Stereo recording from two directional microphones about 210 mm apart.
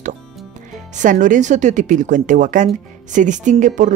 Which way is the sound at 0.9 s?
40° right (ahead or behind).